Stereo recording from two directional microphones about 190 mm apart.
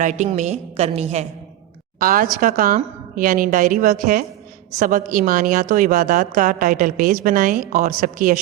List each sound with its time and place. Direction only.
0.0 s a woman's voice: 40° right (ahead or behind)
2.0 s a woman's voice: 45° right (ahead or behind)